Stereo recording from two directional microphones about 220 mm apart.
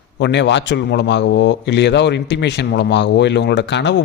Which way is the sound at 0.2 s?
55° left (ahead or behind).